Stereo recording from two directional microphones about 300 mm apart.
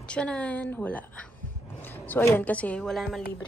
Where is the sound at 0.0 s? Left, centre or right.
Centre.